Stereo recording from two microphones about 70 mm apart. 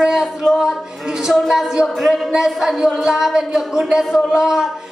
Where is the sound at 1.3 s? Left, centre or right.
Centre.